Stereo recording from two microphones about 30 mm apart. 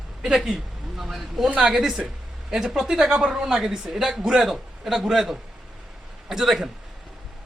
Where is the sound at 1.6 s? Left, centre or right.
Right.